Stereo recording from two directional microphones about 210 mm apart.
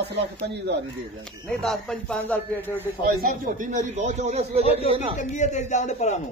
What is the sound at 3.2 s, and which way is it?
Speech, 40° right (ahead or behind).